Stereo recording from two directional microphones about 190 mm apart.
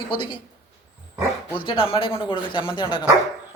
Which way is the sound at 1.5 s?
25° left (ahead or behind).